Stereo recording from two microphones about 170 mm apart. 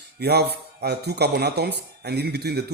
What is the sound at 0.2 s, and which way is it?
Speech, 70° right (ahead or behind).